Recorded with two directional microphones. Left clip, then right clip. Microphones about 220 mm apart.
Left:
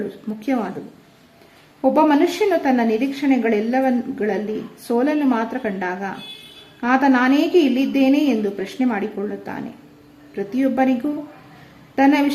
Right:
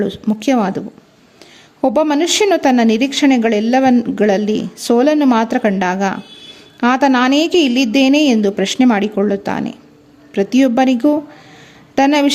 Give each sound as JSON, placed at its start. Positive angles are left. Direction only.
{"t": 0.3, "sound": "speech", "side_deg": -45}
{"t": 1.8, "sound": "speech", "side_deg": -45}
{"t": 11.9, "sound": "speech", "side_deg": -45}